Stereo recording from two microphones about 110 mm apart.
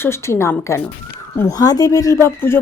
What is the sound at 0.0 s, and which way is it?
A woman's voice, 25° left (ahead or behind).